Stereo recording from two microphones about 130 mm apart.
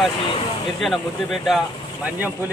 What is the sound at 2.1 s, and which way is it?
Speech, 15° right (ahead or behind).